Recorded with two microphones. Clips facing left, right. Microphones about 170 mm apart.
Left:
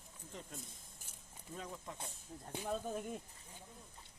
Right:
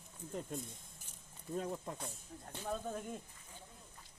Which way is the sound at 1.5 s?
50° right (ahead or behind).